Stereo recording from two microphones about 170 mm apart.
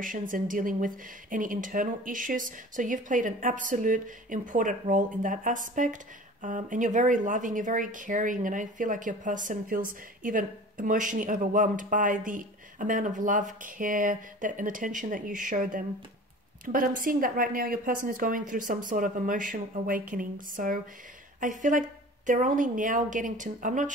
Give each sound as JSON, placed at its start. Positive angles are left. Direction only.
{"t": 0.0, "sound": "speech", "side_deg": -50}